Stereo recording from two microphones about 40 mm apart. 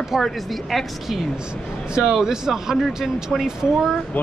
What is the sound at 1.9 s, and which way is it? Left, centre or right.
Speech, centre.